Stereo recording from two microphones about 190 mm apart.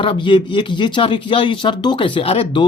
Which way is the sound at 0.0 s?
25° left (ahead or behind).